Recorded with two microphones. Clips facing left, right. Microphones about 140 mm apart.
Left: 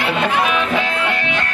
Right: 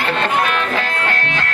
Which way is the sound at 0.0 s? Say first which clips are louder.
Even; 5° left (ahead or behind).